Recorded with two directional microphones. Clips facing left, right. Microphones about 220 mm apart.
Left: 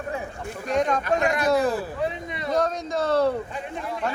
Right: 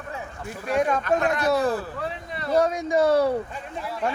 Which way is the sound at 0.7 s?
5° right (ahead or behind).